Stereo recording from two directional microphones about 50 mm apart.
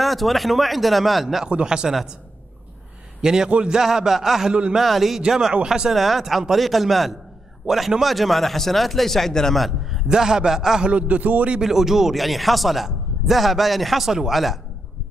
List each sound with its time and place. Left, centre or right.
0.0 s speech: centre
1.5 s speech: centre
3.2 s a man's voice: centre
3.8 s speech: centre
5.9 s speech: centre
10.1 s speech: centre
10.8 s a man's voice: right
11.5 s speech: centre